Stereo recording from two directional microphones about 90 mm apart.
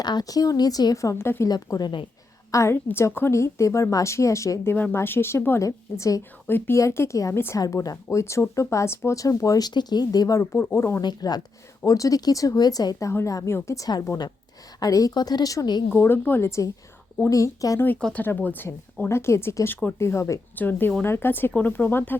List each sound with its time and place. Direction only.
0.0 s a woman's voice: 50° left (ahead or behind)
1.2 s speech: 30° left (ahead or behind)
1.5 s a woman's voice: 50° left (ahead or behind)
2.5 s speech: 30° left (ahead or behind)
4.7 s speech: 20° left (ahead or behind); by 10.4 s 45° left (ahead or behind)
10.5 s speech: 30° left (ahead or behind)
11.0 s a woman's voice: 50° left (ahead or behind)
15.9 s speech: 25° left (ahead or behind); by 17.7 s 40° left (ahead or behind)
17.7 s speech: 20° left (ahead or behind)
20.6 s speech: 25° left (ahead or behind)